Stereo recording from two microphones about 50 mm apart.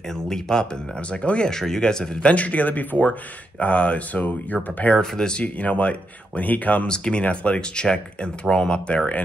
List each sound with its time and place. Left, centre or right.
0.1 s speech: centre
1.5 s speech: centre
2.3 s speech: left
5.1 s speech: centre
5.4 s speech: left
6.9 s speech: centre